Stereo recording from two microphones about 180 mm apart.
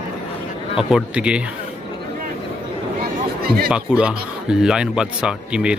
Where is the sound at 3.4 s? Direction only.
60° right (ahead or behind).